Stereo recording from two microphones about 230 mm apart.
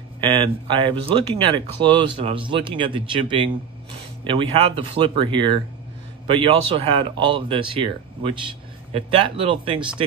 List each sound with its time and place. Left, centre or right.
0.2 s speech: right